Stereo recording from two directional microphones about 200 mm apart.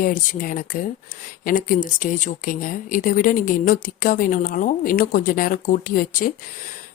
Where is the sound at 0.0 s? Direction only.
45° left (ahead or behind).